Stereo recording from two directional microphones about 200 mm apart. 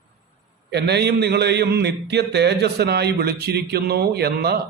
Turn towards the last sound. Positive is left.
turn(degrees=-55)  # may be behind; listen again after turning